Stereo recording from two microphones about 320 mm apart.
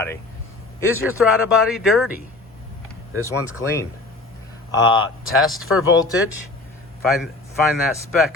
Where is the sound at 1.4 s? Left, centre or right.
Centre.